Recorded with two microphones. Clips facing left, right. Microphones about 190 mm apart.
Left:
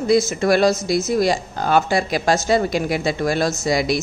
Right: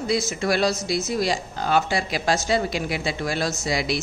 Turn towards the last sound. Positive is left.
turn(degrees=45)  # may be behind; listen again after turning